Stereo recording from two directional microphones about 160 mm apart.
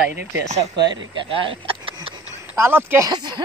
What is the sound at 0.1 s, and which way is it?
Speech, 90° right.